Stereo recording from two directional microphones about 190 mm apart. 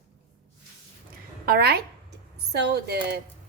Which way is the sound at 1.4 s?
55° right (ahead or behind).